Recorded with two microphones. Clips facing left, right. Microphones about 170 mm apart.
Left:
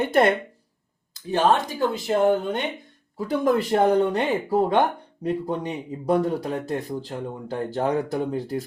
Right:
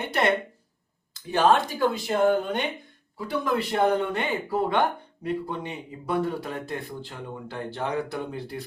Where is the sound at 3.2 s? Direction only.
45° left (ahead or behind).